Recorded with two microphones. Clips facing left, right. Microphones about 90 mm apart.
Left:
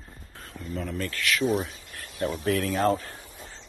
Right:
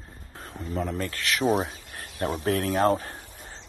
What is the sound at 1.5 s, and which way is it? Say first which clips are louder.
Speech: right 5 dB; 45° right (ahead or behind).